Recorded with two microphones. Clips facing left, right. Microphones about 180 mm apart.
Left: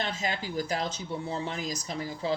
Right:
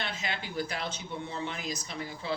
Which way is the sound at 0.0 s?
40° left (ahead or behind).